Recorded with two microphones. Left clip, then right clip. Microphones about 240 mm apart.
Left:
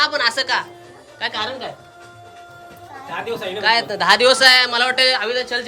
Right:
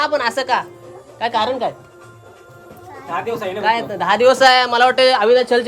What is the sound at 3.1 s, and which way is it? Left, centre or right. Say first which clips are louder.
Speech: right 3 dB; right.